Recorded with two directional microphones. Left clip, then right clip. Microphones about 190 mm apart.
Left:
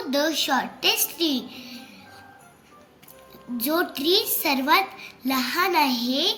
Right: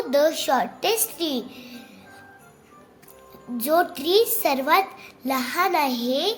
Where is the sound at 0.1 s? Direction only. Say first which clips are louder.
Right 3 dB; 60° right (ahead or behind).